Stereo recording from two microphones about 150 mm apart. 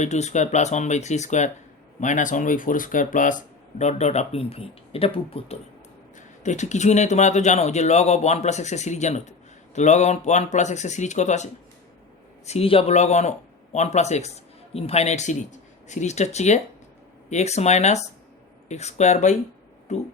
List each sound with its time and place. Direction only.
0.0 s speech: 50° left (ahead or behind)
6.1 s speech: 55° left (ahead or behind)
12.5 s speech: 40° left (ahead or behind)